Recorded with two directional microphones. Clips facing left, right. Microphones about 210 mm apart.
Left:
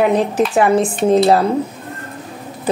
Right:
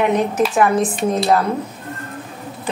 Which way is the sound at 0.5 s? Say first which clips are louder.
Left 4 dB; 30° left (ahead or behind).